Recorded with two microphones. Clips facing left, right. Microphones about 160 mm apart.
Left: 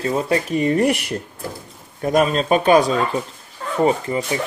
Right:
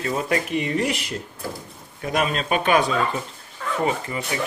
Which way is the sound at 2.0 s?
40° left (ahead or behind).